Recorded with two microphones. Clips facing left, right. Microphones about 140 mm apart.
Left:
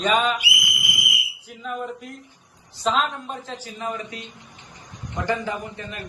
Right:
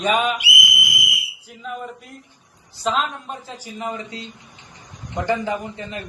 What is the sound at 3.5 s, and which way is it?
A man's voice, 15° right (ahead or behind).